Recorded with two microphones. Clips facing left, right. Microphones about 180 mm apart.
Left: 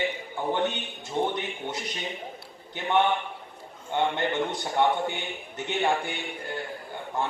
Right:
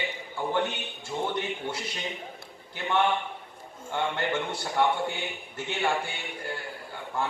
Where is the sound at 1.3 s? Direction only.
20° left (ahead or behind).